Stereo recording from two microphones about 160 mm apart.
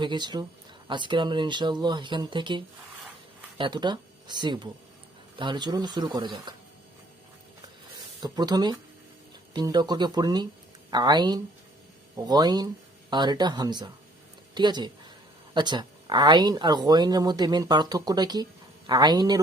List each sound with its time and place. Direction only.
0.0 s speech: 30° right (ahead or behind)
8.2 s speech: 25° right (ahead or behind)